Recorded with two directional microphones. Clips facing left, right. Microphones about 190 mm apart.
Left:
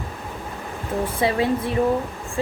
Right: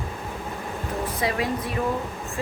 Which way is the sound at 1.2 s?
30° left (ahead or behind).